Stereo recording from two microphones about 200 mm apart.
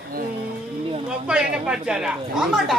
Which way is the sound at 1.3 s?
5° right (ahead or behind).